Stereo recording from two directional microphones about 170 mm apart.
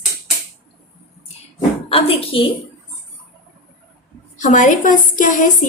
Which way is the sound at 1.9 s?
35° left (ahead or behind).